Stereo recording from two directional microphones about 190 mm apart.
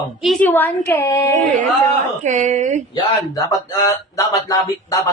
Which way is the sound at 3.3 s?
20° left (ahead or behind).